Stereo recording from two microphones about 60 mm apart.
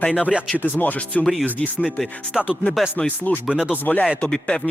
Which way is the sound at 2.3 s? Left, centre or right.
Centre.